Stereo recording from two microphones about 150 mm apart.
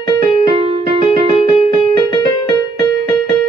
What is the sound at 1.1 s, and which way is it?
Music, 40° left (ahead or behind).